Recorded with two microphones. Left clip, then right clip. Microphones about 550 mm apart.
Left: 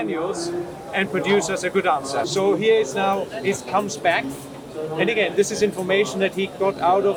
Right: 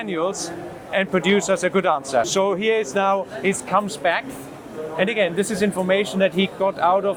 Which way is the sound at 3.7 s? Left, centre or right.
Right.